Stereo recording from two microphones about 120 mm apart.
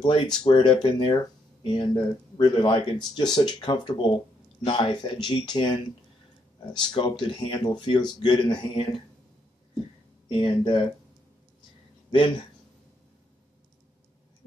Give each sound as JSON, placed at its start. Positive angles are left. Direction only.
{"t": 0.0, "sound": "speech", "side_deg": 45}
{"t": 10.2, "sound": "speech", "side_deg": 40}